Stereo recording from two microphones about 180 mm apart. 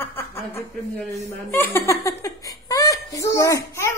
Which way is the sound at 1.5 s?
10° left (ahead or behind).